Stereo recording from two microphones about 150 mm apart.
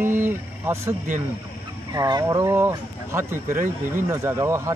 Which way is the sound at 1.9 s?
25° right (ahead or behind).